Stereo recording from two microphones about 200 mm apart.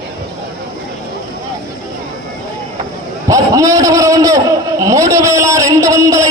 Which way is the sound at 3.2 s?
15° right (ahead or behind).